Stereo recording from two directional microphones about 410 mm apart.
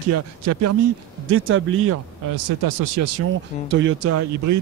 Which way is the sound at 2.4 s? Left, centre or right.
Right.